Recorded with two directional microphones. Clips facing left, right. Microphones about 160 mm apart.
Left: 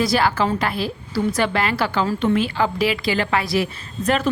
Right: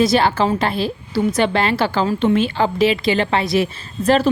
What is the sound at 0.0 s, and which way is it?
A woman's voice, 25° right (ahead or behind).